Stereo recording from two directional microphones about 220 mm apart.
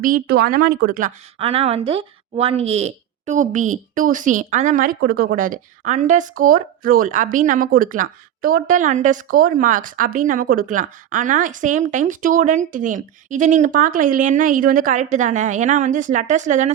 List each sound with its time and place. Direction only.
0.0 s speech: 40° right (ahead or behind)
1.4 s speech: 25° right (ahead or behind)